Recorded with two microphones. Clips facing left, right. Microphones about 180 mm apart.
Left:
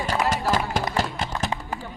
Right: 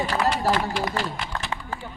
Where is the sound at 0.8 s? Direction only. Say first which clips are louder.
Left 1 dB; 45° left (ahead or behind).